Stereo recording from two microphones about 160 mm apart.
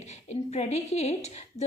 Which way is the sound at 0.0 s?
45° left (ahead or behind).